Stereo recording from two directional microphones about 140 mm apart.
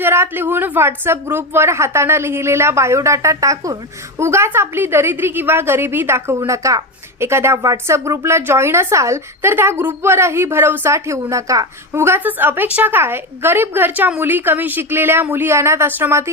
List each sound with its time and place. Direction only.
0.0 s a woman's voice: 15° right (ahead or behind)